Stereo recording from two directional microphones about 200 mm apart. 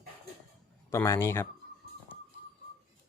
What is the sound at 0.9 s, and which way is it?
Speech, 15° left (ahead or behind).